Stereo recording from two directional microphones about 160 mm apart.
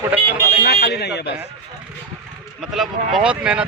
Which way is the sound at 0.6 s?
90° left.